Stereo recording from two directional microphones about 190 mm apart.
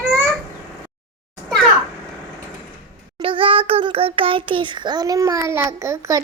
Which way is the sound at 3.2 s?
30° right (ahead or behind).